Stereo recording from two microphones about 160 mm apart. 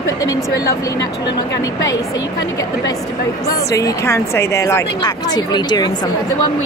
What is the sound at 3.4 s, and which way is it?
Speech, 20° left (ahead or behind).